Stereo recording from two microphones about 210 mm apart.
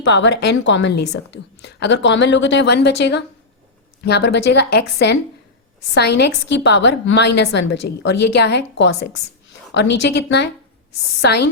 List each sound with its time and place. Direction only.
0.0 s a woman's voice: 55° left (ahead or behind)